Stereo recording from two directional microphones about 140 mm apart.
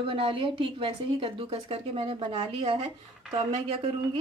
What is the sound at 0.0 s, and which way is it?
A woman's voice, 40° right (ahead or behind).